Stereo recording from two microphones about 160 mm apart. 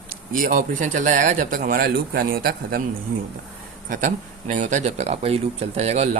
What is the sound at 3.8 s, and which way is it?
Speech, 55° right (ahead or behind).